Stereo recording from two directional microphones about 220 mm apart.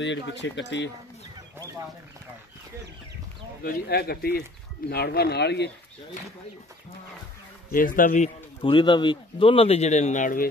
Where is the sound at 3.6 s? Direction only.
45° left (ahead or behind).